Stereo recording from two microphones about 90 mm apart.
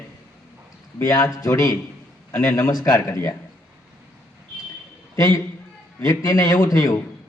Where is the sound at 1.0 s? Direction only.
40° left (ahead or behind).